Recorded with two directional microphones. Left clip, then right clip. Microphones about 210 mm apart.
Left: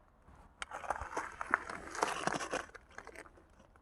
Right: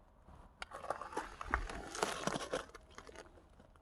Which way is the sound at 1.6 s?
30° right (ahead or behind).